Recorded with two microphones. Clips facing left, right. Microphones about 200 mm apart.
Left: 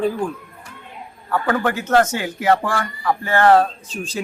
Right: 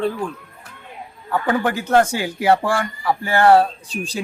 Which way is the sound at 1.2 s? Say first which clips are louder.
Even; 15° right (ahead or behind).